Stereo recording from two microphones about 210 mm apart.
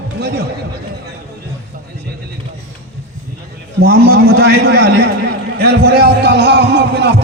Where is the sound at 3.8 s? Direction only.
50° right (ahead or behind).